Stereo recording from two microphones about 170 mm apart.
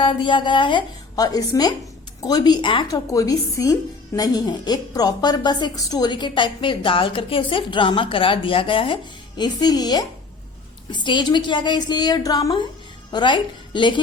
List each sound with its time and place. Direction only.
0.0 s a woman's voice: 30° left (ahead or behind)